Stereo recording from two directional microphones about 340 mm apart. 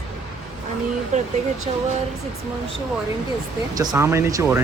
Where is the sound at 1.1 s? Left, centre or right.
Centre.